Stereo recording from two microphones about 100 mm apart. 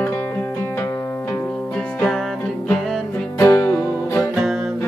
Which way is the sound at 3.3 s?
30° left (ahead or behind).